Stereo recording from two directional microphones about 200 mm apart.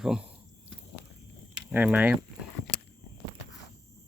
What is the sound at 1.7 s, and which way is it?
Speech, 10° right (ahead or behind).